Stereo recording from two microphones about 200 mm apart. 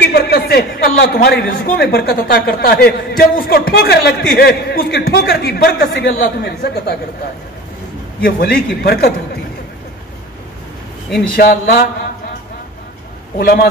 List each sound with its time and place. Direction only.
0.0 s a sound: 50° left (ahead or behind)
1.6 s a man's voice: 50° left (ahead or behind)
8.2 s a man's voice: 50° left (ahead or behind)
11.1 s speech: centre (ahead or behind)
11.3 s a man's voice: 50° left (ahead or behind)
13.4 s a man's voice: 50° left (ahead or behind)